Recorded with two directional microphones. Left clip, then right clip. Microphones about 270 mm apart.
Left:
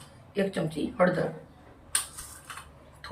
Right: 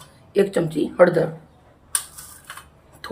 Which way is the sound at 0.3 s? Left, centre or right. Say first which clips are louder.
Right 10 dB; centre.